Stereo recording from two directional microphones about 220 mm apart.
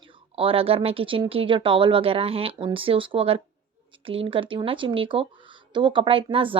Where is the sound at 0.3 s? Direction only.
25° right (ahead or behind).